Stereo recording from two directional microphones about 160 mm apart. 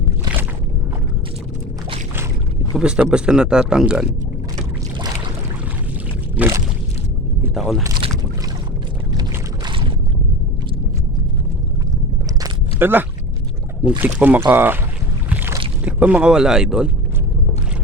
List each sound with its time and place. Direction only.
2.7 s speech: 5° right (ahead or behind)
6.4 s boat: 10° right (ahead or behind)
7.5 s a sound: centre (ahead or behind)
9.6 s boat: 30° right (ahead or behind)
12.4 s biting: 15° right (ahead or behind)
14.0 s speech: 10° right (ahead or behind)
15.3 s boat: 10° right (ahead or behind)
15.8 s speech: 10° right (ahead or behind)